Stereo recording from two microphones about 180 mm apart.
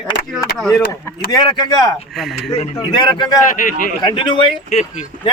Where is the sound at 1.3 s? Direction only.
25° left (ahead or behind).